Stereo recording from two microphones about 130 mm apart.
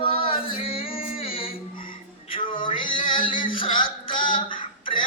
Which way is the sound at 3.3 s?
90° left.